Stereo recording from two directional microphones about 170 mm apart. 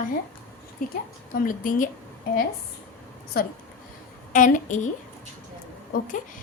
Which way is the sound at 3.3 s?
60° left (ahead or behind).